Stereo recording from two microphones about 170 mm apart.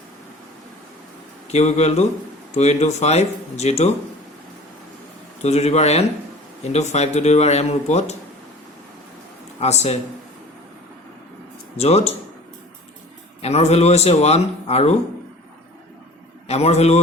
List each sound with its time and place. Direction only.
1.5 s speech: 40° left (ahead or behind)
5.4 s speech: 40° left (ahead or behind)
9.6 s speech: 40° left (ahead or behind)
11.8 s speech: 40° left (ahead or behind)
13.4 s speech: 40° left (ahead or behind)
16.5 s speech: 40° left (ahead or behind)